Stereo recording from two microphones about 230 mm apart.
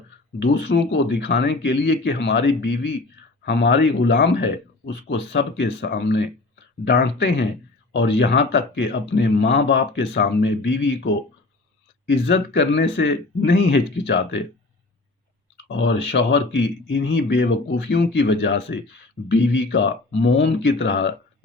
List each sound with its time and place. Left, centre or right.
0.4 s speech: left
15.7 s speech: left